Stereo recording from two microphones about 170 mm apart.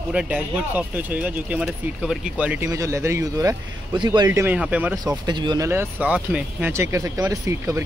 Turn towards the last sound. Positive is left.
turn(degrees=-15)  # may be behind; listen again after turning